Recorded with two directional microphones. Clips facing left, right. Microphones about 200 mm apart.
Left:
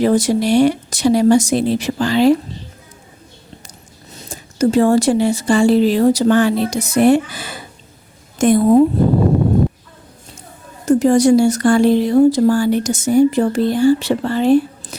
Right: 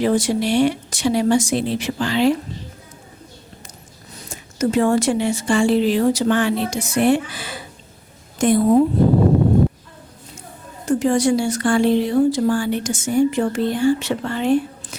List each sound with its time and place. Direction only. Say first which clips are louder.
0.0 s speech: left 4 dB; 40° left (ahead or behind)
4.3 s a woman's voice: left 5 dB; 35° left (ahead or behind)
10.8 s speech: left 6 dB; 40° left (ahead or behind)